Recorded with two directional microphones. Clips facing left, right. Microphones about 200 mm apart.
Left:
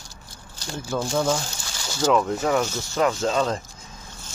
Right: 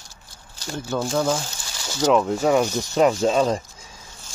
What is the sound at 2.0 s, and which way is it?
Speech, 20° right (ahead or behind).